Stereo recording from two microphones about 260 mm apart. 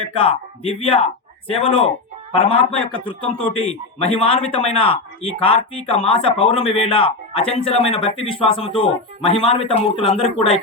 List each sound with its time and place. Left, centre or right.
0.0 s speech: left